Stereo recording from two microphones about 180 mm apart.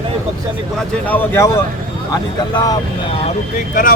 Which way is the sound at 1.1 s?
10° left (ahead or behind).